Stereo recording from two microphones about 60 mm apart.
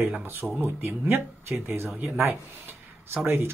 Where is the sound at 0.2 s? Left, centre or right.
Right.